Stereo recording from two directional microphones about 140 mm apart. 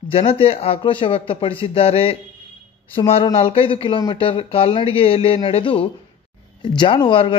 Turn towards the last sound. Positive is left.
turn(degrees=35)  # may be behind; listen again after turning